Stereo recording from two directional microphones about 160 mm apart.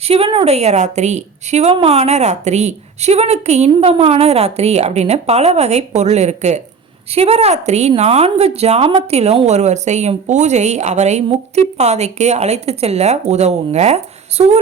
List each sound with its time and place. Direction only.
0.0 s a woman's voice: 35° right (ahead or behind)